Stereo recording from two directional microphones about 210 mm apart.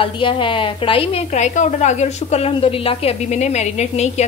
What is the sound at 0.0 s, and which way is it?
A woman's voice, 25° left (ahead or behind).